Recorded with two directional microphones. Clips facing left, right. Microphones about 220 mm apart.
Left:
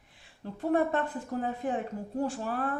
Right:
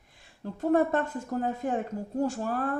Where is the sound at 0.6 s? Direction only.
45° right (ahead or behind).